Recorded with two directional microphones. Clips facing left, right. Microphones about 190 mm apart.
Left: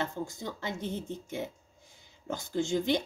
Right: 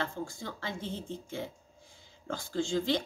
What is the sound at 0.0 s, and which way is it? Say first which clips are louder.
Speech: left 2 dB; 20° left (ahead or behind).